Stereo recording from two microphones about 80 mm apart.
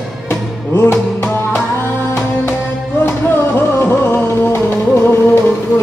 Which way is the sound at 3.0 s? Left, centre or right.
Left.